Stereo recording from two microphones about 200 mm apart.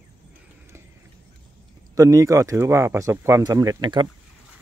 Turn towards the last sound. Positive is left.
turn(degrees=-20)  # may be behind; listen again after turning